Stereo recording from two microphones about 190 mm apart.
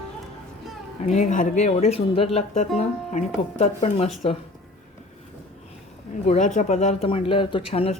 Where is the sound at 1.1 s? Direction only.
40° left (ahead or behind).